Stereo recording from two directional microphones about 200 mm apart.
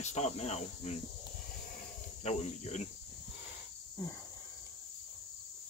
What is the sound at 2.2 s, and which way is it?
Speech, 35° left (ahead or behind).